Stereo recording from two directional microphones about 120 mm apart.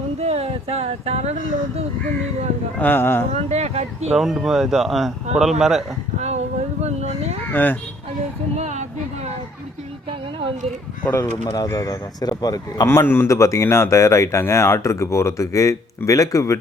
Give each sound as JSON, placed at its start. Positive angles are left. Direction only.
{"t": 0.2, "sound": "speech", "side_deg": -60}
{"t": 2.7, "sound": "speech", "side_deg": 15}
{"t": 3.3, "sound": "speech", "side_deg": -65}
{"t": 4.2, "sound": "speech", "side_deg": 0}
{"t": 6.1, "sound": "a sound", "side_deg": -70}
{"t": 7.4, "sound": "speech", "side_deg": 15}
{"t": 8.5, "sound": "a sound", "side_deg": -75}
{"t": 11.0, "sound": "speech", "side_deg": 25}
{"t": 12.9, "sound": "speech", "side_deg": 20}